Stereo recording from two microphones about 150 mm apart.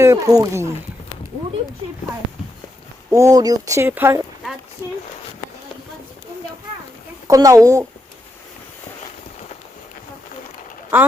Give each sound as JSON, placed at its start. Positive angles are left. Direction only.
{"t": 0.0, "sound": "speech", "side_deg": -20}
{"t": 3.1, "sound": "speech", "side_deg": -25}
{"t": 7.3, "sound": "speech", "side_deg": -25}